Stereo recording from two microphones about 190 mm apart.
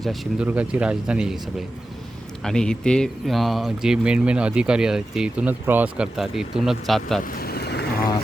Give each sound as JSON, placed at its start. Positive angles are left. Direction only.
{"t": 0.0, "sound": "speech", "side_deg": 0}
{"t": 7.3, "sound": "vehicle", "side_deg": 55}